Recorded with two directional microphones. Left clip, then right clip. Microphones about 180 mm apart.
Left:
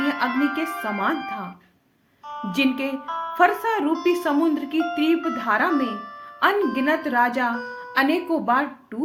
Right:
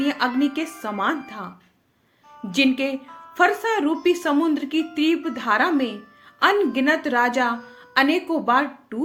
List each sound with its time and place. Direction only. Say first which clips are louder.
0.0 s speech: even; 30° right (ahead or behind)
2.5 s speech: right 3 dB; 30° right (ahead or behind)
3.1 s music: left 14 dB; 35° left (ahead or behind)
3.3 s a woman's voice: even; 30° right (ahead or behind)